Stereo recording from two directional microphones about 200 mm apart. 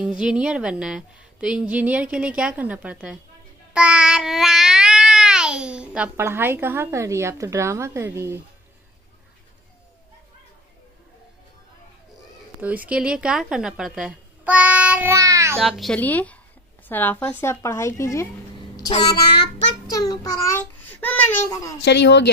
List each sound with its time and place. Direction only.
0.0 s a woman's voice: 5° right (ahead or behind)
3.7 s a sound: 5° right (ahead or behind)
12.6 s a woman's voice: 5° right (ahead or behind)
15.6 s a child's voice: centre (ahead or behind)
19.0 s child singing: 20° left (ahead or behind)
19.9 s a child's voice: 20° left (ahead or behind)
21.8 s speech: 60° left (ahead or behind)